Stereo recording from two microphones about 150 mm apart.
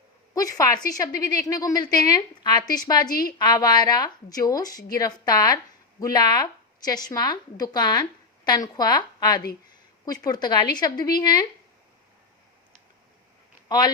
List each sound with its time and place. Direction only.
0.3 s a woman's voice: 25° left (ahead or behind)
13.7 s a man's voice: 25° left (ahead or behind)